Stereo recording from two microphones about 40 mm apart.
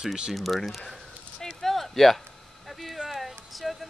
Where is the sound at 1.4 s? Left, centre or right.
Centre.